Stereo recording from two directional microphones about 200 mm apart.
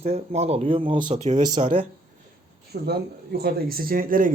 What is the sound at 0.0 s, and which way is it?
Speech, 30° right (ahead or behind).